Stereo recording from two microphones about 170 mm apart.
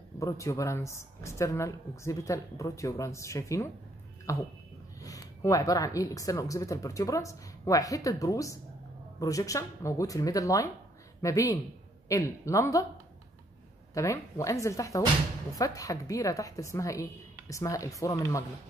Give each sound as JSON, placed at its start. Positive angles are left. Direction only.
{"t": 0.2, "sound": "speech", "side_deg": 20}
{"t": 13.9, "sound": "speech", "side_deg": 15}